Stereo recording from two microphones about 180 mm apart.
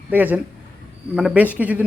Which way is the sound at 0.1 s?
10° right (ahead or behind).